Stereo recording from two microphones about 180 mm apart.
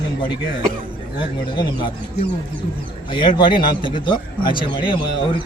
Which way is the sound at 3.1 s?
25° left (ahead or behind).